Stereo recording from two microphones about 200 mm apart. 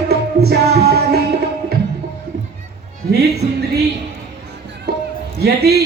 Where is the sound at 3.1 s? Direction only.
55° right (ahead or behind).